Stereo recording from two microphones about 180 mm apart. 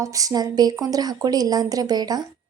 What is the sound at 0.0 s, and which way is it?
A woman's voice, 20° right (ahead or behind).